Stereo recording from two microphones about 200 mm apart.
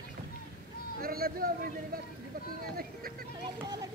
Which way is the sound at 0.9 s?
50° right (ahead or behind).